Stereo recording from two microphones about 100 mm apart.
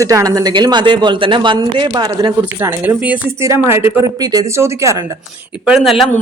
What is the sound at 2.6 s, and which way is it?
Speech, 20° right (ahead or behind).